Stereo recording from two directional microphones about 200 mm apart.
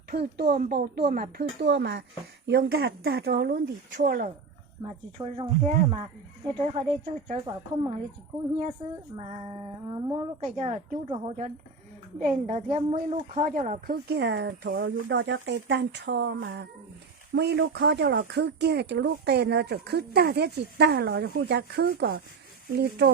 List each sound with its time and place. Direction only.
0.1 s speech: 50° right (ahead or behind)
4.8 s speech: 30° right (ahead or behind)
9.8 s speech: 20° right (ahead or behind)
10.4 s speech: 35° right (ahead or behind); by 23.0 s 55° right (ahead or behind)